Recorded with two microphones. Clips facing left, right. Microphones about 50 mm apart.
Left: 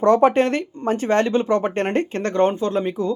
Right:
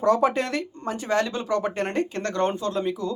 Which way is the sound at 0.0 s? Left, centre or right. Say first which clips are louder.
Left 6 dB; left.